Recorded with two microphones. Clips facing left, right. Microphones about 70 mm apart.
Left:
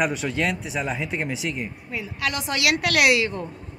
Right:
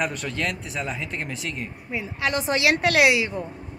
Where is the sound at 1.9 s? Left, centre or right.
Right.